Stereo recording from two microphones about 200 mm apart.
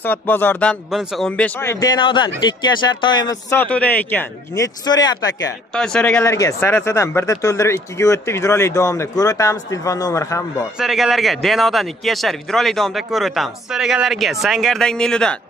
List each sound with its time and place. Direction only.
0.0 s speech: 10° left (ahead or behind)
4.8 s speech: 20° left (ahead or behind)
5.7 s a man's voice: 5° left (ahead or behind)
6.2 s speech: 15° left (ahead or behind)
10.8 s a man's voice: centre (ahead or behind)